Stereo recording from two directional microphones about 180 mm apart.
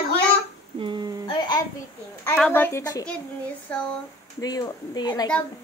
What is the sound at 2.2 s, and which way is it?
Speech, 5° left (ahead or behind).